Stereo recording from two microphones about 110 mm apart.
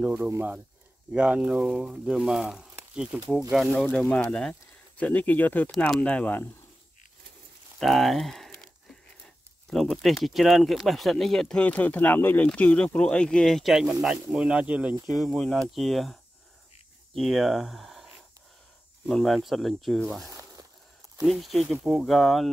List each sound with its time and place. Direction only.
0.0 s speech: 10° right (ahead or behind); by 6.5 s 15° left (ahead or behind)
7.8 s crumpling: centre (ahead or behind)
9.7 s speech: centre (ahead or behind)
15.2 s speech: 10° left (ahead or behind)
20.2 s a sound: 30° right (ahead or behind)
21.2 s speech: centre (ahead or behind)